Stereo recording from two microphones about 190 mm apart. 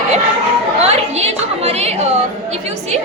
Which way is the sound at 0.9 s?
35° right (ahead or behind).